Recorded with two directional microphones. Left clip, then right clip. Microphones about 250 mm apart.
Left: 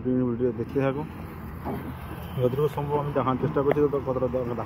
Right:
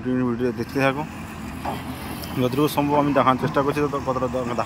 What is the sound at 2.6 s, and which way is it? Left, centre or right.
Speech, right.